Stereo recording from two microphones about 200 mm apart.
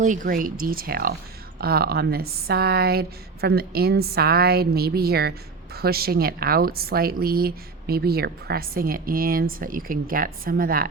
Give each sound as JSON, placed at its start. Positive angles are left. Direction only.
{"t": 0.0, "sound": "speech", "side_deg": -40}